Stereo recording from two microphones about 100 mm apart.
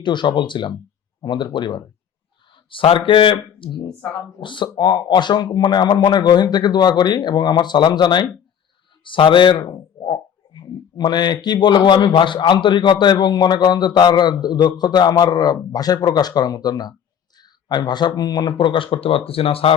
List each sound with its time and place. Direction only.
0.0 s speech: 50° left (ahead or behind)
2.6 s speech: 65° left (ahead or behind)